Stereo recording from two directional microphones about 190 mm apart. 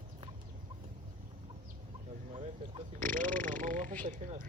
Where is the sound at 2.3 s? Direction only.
25° right (ahead or behind).